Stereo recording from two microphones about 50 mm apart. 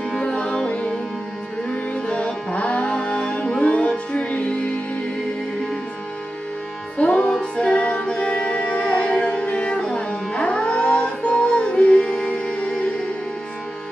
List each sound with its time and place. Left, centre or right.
0.1 s music: centre
2.0 s music: left
7.0 s music: left